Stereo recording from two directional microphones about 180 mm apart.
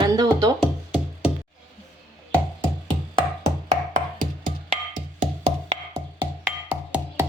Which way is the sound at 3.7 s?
40° right (ahead or behind).